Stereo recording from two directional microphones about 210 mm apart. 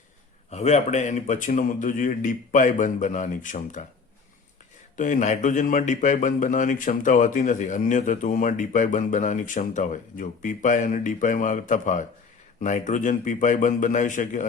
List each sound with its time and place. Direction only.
0.5 s a man's voice: 35° left (ahead or behind)
4.9 s a man's voice: 35° left (ahead or behind)